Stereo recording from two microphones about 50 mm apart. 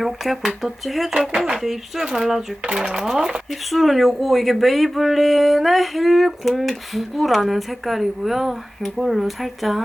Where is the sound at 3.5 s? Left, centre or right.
Centre.